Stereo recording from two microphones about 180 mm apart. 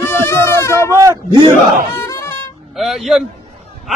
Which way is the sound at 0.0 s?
15° left (ahead or behind).